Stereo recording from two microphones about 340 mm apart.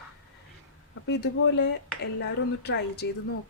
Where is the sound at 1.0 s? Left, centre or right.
Left.